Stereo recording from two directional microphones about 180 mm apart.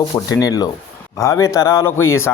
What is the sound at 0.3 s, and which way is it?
Speech, 20° left (ahead or behind).